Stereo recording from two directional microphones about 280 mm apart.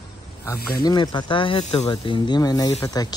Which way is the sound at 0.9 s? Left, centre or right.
Centre.